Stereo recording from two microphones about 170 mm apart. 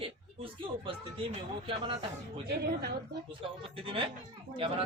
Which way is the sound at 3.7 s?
35° right (ahead or behind).